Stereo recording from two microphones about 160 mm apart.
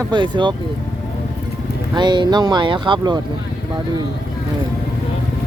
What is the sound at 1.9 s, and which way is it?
Speech, 30° right (ahead or behind).